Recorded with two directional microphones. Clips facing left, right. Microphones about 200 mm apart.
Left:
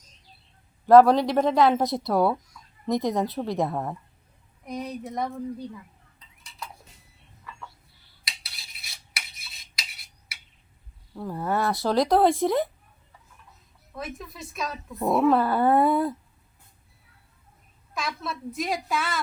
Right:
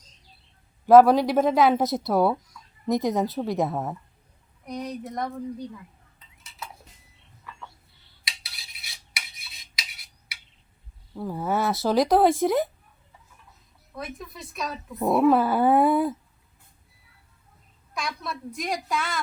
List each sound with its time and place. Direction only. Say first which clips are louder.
0.9 s speech: right 1 dB; centre (ahead or behind)
8.2 s cutlery: right 1 dB; centre (ahead or behind)
11.1 s speech: right 1 dB; 5° right (ahead or behind)
13.9 s speech: even; centre (ahead or behind)
17.9 s speech: left 1 dB; centre (ahead or behind)